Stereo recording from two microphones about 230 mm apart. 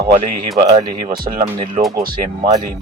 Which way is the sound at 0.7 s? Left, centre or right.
Right.